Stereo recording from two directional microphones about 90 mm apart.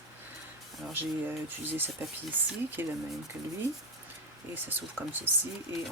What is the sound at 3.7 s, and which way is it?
Speech, 35° left (ahead or behind).